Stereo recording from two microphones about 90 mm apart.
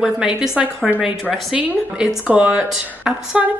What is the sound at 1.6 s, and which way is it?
Speech, 15° right (ahead or behind).